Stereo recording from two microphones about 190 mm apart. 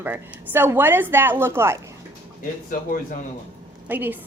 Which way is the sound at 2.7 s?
45° left (ahead or behind).